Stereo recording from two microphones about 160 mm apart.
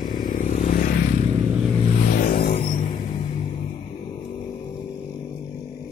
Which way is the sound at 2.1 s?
55° left (ahead or behind).